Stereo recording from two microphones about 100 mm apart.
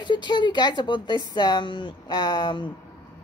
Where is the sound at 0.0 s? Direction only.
50° left (ahead or behind).